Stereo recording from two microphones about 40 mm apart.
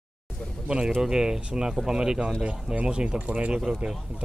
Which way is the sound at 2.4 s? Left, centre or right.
Right.